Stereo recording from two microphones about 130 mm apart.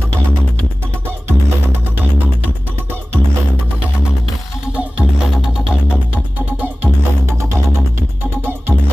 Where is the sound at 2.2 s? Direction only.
15° right (ahead or behind).